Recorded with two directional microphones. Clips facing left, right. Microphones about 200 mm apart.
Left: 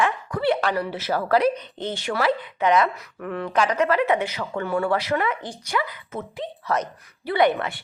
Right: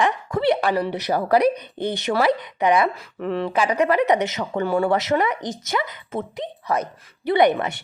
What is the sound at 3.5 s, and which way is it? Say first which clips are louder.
A woman's voice: right 1 dB; 15° right (ahead or behind).